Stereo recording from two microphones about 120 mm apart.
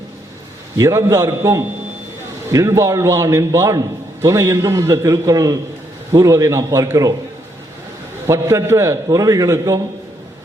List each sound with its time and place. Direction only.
0.8 s a man's voice: 25° right (ahead or behind)
8.3 s a man's voice: 25° right (ahead or behind)